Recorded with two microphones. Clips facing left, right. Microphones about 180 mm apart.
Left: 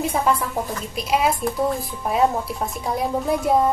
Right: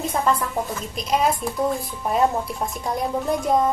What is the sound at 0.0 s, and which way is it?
A woman's voice, 10° left (ahead or behind).